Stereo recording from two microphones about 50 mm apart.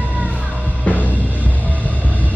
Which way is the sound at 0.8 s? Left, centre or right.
Left.